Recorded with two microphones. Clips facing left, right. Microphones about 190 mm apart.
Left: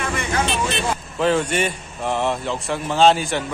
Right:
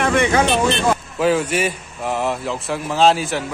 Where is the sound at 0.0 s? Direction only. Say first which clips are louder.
Right 8 dB; 75° right (ahead or behind).